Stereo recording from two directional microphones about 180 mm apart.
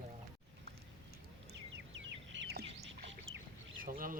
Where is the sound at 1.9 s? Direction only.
90° right.